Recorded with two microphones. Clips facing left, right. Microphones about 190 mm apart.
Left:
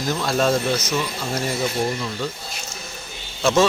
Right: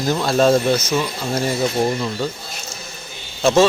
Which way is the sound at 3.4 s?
30° right (ahead or behind).